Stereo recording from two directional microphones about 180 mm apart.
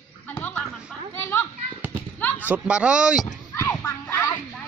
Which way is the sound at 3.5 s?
10° left (ahead or behind).